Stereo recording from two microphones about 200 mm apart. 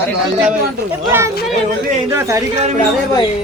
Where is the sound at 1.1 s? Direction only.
15° right (ahead or behind).